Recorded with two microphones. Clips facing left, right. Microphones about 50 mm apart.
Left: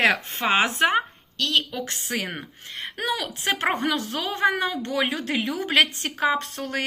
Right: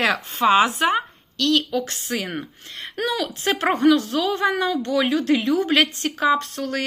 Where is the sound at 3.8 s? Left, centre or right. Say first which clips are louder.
Right 8 dB; left.